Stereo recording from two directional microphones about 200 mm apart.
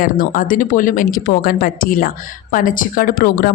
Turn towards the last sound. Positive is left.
turn(degrees=45)  # may be behind; listen again after turning